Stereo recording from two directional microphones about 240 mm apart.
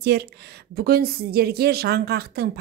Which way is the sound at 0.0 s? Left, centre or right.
Right.